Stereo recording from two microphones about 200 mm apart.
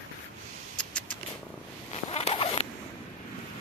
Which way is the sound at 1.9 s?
30° left (ahead or behind).